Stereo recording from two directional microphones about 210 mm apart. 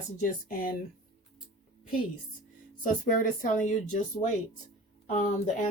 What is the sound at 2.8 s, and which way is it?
Speech, 40° left (ahead or behind).